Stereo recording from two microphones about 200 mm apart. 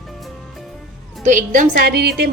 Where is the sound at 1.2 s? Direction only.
40° right (ahead or behind).